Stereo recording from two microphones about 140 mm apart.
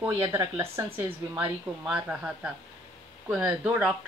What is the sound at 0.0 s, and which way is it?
A woman's voice, 20° right (ahead or behind).